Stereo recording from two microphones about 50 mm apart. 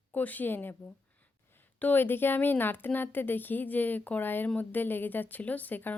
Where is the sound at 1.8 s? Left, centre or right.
Left.